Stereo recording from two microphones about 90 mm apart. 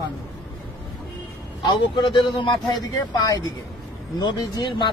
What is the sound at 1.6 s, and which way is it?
Speech, 60° left (ahead or behind).